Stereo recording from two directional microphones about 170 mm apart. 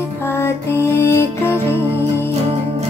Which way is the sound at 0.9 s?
15° left (ahead or behind).